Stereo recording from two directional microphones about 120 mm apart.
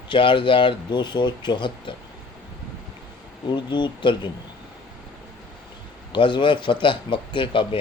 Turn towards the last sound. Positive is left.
turn(degrees=45)  # may be behind; listen again after turning